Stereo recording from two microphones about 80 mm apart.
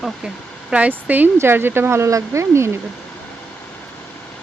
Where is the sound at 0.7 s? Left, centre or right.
Centre; by 2.7 s right.